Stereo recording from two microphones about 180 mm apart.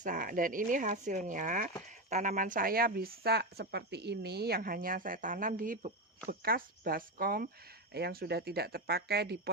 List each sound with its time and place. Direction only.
0.0 s speech: 50° right (ahead or behind); by 9.5 s 65° right (ahead or behind)